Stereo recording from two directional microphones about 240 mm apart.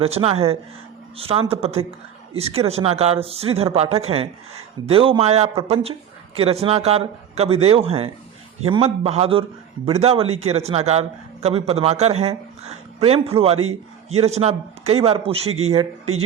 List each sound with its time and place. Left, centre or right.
0.0 s speech: right